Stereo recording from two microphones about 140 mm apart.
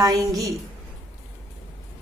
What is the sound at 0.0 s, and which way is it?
Speech, 25° right (ahead or behind).